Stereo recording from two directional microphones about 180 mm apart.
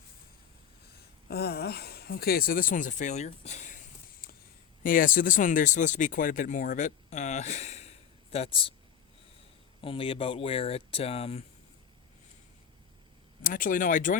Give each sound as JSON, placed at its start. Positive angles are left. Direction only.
{"t": 1.3, "sound": "speech", "side_deg": 60}
{"t": 9.8, "sound": "speech", "side_deg": 30}
{"t": 13.4, "sound": "speech", "side_deg": 50}